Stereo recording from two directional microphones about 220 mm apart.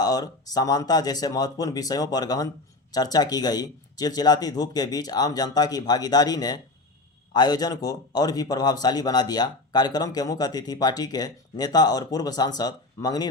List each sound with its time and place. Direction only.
0.0 s speech: 15° left (ahead or behind)